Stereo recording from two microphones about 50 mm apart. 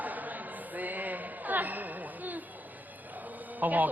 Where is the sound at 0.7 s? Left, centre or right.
Right.